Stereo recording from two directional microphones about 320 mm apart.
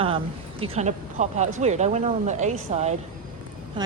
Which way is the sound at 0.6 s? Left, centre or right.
Centre.